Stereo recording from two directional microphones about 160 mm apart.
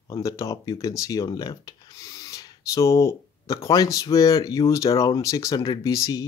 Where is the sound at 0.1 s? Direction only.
20° left (ahead or behind).